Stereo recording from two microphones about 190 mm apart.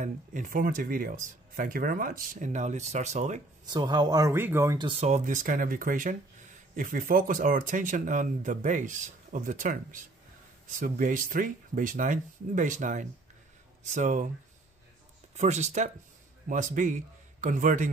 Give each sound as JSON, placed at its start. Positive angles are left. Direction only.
{"t": 0.0, "sound": "speech", "side_deg": -40}
{"t": 3.6, "sound": "speech", "side_deg": -25}
{"t": 4.8, "sound": "speech", "side_deg": -35}
{"t": 15.3, "sound": "a man's voice", "side_deg": -35}